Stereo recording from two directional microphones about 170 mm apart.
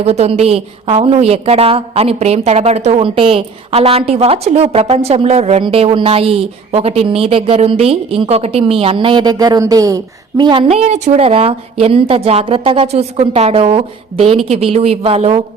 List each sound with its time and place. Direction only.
0.0 s a woman's voice: 40° right (ahead or behind)